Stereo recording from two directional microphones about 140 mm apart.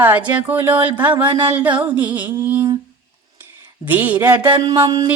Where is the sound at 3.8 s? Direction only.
15° right (ahead or behind).